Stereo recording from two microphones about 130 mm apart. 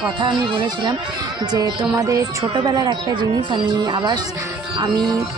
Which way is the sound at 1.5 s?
25° right (ahead or behind).